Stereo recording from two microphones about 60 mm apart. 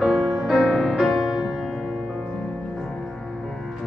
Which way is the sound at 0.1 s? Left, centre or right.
Centre.